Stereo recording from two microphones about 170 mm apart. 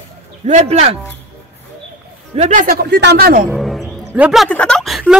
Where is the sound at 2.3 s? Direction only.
45° right (ahead or behind).